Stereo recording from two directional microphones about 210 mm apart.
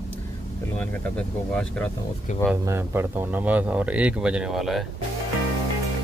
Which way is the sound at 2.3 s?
35° left (ahead or behind).